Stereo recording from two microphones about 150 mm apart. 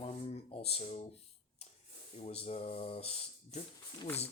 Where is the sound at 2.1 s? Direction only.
45° left (ahead or behind).